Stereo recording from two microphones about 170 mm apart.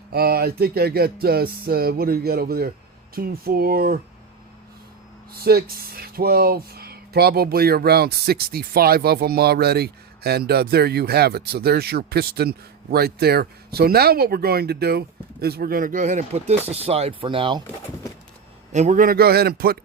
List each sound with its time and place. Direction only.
0.1 s speech: 65° right (ahead or behind)
5.3 s speech: 65° right (ahead or behind); by 17.6 s 30° right (ahead or behind)
18.7 s speech: 45° right (ahead or behind); by 19.8 s 60° right (ahead or behind)